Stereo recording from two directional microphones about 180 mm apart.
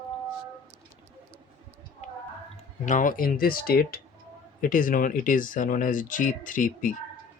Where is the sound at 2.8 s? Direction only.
45° left (ahead or behind).